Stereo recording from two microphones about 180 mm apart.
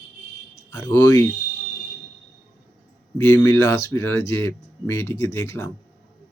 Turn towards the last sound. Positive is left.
turn(degrees=15)  # may be behind; listen again after turning